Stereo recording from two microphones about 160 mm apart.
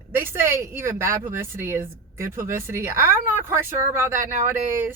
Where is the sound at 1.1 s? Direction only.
60° right (ahead or behind).